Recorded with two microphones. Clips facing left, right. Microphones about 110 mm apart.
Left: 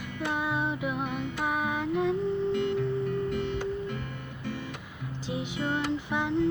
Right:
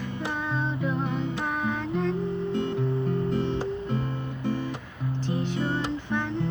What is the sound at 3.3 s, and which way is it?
Music, 30° right (ahead or behind).